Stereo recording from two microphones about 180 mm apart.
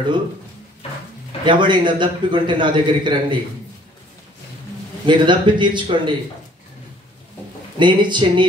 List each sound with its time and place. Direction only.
1.4 s a man's voice: 25° right (ahead or behind)
5.0 s a man's voice: 25° right (ahead or behind)
7.8 s a man's voice: 25° right (ahead or behind)